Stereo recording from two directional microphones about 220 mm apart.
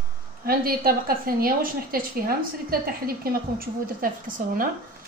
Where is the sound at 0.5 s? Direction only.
45° right (ahead or behind).